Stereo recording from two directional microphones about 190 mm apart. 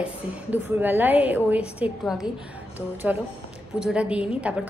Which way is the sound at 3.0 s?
5° right (ahead or behind).